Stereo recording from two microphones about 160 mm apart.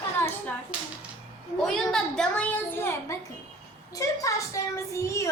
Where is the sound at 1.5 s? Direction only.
5° left (ahead or behind).